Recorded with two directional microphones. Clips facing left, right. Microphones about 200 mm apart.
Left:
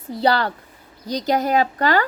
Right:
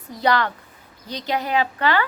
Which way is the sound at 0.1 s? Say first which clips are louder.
Left 2 dB; 30° left (ahead or behind).